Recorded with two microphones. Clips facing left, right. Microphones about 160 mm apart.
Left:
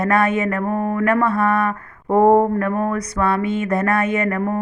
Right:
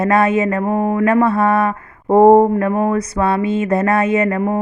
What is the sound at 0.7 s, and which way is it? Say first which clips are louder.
Speech: right 4 dB; 10° right (ahead or behind).